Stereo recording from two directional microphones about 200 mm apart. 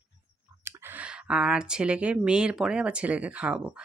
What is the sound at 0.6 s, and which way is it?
Speech, 10° right (ahead or behind).